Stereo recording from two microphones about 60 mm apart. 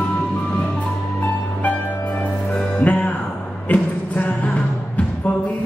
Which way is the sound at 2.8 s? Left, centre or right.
Left.